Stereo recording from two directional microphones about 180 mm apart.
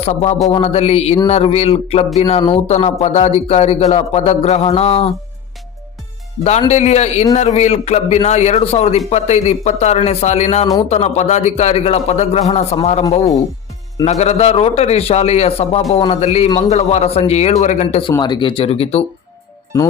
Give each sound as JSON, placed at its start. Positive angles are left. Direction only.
{"t": 0.0, "sound": "speech", "side_deg": 35}
{"t": 6.7, "sound": "speech", "side_deg": 40}
{"t": 18.1, "sound": "speech", "side_deg": 25}